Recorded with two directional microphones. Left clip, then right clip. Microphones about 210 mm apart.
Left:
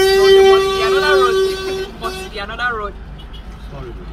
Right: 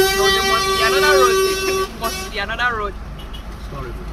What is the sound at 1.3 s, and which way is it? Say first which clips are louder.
Speech: even; 45° left (ahead or behind).